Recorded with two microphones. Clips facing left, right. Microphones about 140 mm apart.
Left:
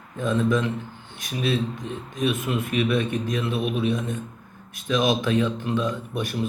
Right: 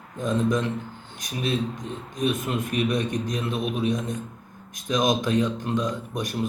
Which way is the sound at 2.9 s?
40° right (ahead or behind).